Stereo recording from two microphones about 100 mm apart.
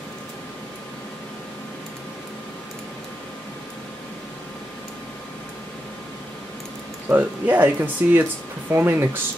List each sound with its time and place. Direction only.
7.1 s speech: 20° right (ahead or behind)